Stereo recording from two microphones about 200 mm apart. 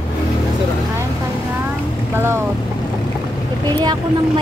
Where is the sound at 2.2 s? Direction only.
10° right (ahead or behind).